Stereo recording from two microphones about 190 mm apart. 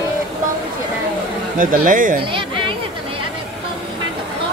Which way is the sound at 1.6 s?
45° right (ahead or behind).